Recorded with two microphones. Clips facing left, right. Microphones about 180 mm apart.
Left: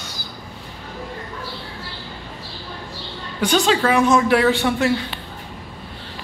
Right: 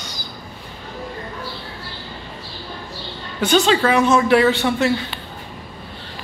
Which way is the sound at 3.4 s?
10° left (ahead or behind).